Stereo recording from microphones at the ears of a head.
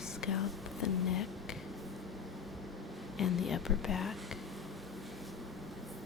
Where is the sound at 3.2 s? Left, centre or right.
Left.